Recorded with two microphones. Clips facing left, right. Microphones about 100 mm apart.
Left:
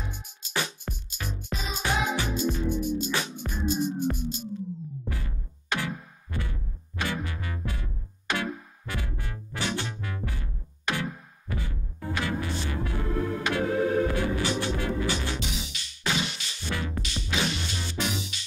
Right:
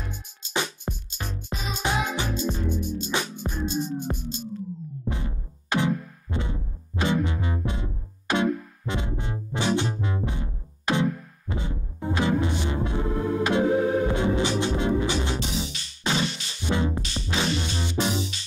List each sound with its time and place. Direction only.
0.4 s music: 25° right (ahead or behind)
15.3 s music: 35° right (ahead or behind)
16.6 s music: 20° right (ahead or behind)